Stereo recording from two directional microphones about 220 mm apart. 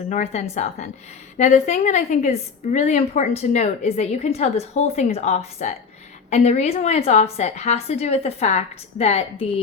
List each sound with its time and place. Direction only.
0.1 s a woman's voice: 30° left (ahead or behind)